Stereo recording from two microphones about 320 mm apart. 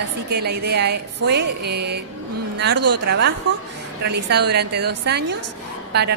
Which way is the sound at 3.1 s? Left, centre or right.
Right.